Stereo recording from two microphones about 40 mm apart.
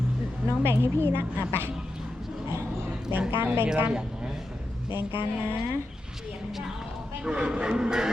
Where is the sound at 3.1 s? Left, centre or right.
Right.